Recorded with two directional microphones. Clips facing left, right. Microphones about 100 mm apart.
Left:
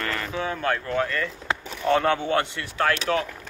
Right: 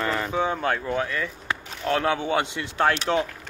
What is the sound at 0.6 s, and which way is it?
Speech, 10° right (ahead or behind).